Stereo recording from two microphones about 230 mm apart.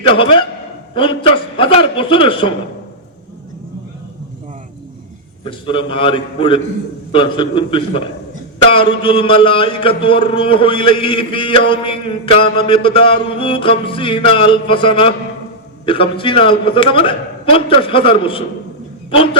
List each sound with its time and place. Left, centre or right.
0.1 s a man's voice: left
1.5 s a man's voice: left
5.5 s a man's voice: left